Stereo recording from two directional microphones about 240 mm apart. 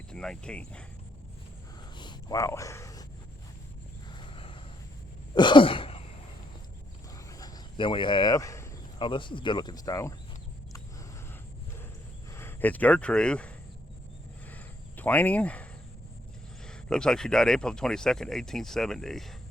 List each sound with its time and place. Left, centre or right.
0.1 s speech: centre
2.0 s a sound: centre
4.1 s a sound: left
5.3 s throat clearing: centre
7.3 s speech: centre
12.3 s speech: centre
14.5 s cricket: centre
16.6 s speech: centre